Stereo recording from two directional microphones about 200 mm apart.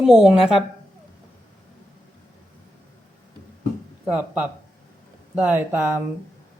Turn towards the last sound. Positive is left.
turn(degrees=-10)  # may be behind; listen again after turning